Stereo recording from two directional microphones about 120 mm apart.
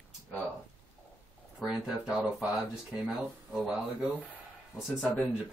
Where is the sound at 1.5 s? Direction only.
5° right (ahead or behind).